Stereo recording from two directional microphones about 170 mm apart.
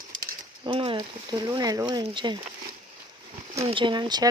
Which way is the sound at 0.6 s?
30° right (ahead or behind).